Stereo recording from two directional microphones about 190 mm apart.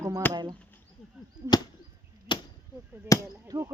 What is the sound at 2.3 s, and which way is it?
Arrow, 25° left (ahead or behind).